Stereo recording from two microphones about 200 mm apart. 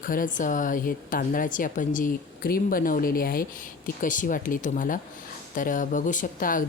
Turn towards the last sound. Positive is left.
turn(degrees=40)  # may be behind; listen again after turning